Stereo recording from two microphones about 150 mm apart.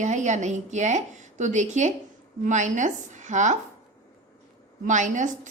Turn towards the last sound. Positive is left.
turn(degrees=-55)  # may be behind; listen again after turning